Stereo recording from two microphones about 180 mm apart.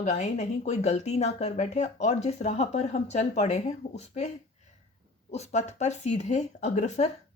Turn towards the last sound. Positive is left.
turn(degrees=40)  # may be behind; listen again after turning